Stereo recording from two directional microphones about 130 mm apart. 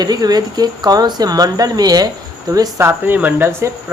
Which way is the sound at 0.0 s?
30° right (ahead or behind).